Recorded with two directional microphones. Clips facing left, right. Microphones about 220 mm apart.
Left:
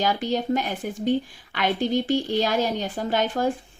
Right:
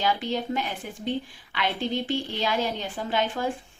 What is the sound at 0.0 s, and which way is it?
A woman's voice, 40° left (ahead or behind).